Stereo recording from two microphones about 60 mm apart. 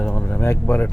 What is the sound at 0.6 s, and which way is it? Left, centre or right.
Speech, left.